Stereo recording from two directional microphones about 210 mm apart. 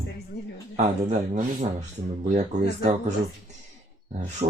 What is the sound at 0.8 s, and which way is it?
Speech, 35° right (ahead or behind).